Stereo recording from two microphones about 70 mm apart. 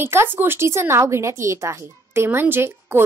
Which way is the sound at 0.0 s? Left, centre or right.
Right.